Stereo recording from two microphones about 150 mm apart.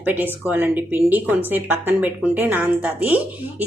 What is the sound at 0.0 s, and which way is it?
A woman's voice, 10° right (ahead or behind).